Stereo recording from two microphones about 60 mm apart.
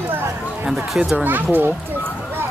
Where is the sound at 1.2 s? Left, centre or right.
Right.